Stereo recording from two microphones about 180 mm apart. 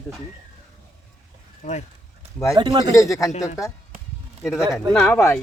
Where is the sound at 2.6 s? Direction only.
25° right (ahead or behind).